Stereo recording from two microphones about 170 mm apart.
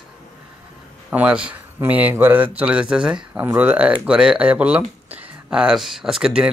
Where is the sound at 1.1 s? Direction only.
5° right (ahead or behind).